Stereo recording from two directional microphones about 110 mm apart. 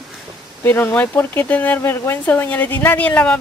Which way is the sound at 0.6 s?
20° left (ahead or behind).